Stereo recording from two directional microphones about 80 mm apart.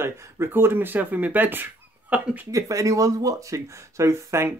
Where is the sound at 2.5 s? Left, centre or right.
Right.